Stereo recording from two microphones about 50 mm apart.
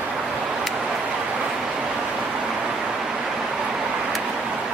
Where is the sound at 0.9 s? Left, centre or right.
Right.